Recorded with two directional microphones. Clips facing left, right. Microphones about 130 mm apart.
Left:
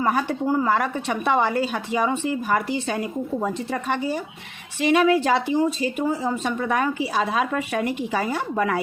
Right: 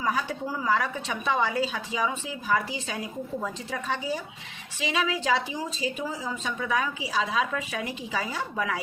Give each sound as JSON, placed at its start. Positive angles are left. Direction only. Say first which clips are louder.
{"t": 0.0, "sound": "a woman's voice", "louder": "left 6 dB", "side_deg": 55}